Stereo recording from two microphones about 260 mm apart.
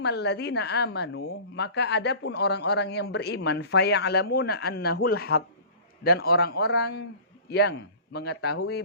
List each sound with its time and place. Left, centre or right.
0.0 s a woman's voice: left